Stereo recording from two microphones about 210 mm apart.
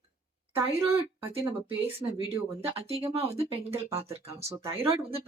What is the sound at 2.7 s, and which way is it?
Speech, 25° right (ahead or behind).